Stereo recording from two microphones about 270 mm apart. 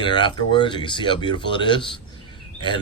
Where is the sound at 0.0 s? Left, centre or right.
Centre.